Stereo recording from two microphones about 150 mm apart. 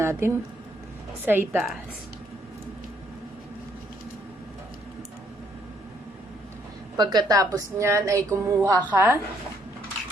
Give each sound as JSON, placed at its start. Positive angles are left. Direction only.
{"t": 0.0, "sound": "a woman's voice", "side_deg": -15}
{"t": 1.5, "sound": "a woman's voice", "side_deg": 0}
{"t": 6.9, "sound": "a woman's voice", "side_deg": -30}